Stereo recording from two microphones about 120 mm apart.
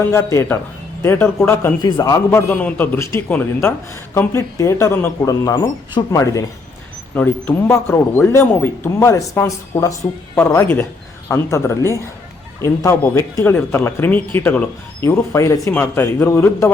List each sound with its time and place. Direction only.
0.1 s a man's voice: 25° left (ahead or behind)
1.8 s a man's voice: 35° left (ahead or behind)
2.6 s a man's voice: 15° left (ahead or behind)
7.1 s a man's voice: 15° left (ahead or behind)
15.7 s a man's voice: 15° left (ahead or behind)